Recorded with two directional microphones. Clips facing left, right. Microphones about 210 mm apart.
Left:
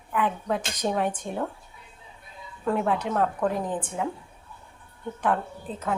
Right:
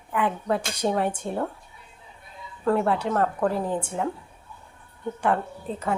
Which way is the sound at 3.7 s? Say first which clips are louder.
Right 3 dB; 10° right (ahead or behind).